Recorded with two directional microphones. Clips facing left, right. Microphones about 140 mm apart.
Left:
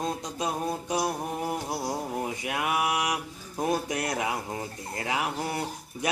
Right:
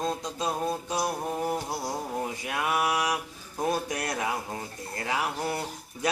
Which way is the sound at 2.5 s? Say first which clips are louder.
Even; 20° left (ahead or behind).